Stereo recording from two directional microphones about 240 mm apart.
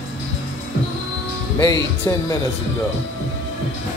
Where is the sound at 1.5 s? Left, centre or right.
Centre.